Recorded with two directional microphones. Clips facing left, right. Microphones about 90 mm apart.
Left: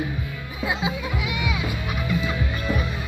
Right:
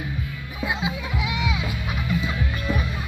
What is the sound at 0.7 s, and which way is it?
Speech, centre (ahead or behind).